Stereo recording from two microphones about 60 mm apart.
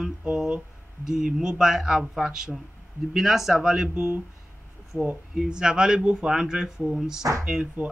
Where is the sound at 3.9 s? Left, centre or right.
Right.